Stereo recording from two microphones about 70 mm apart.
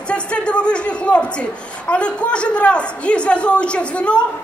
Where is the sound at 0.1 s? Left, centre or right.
Centre.